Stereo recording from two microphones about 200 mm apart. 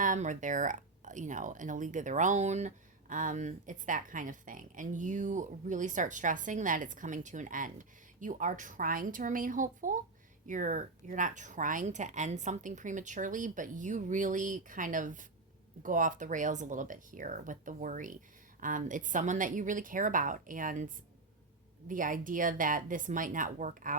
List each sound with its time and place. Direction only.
0.0 s speech: 40° right (ahead or behind)